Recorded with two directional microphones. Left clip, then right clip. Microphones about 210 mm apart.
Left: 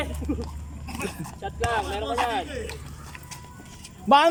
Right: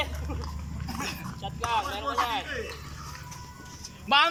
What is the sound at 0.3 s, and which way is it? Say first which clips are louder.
Speech: left 9 dB; 45° left (ahead or behind).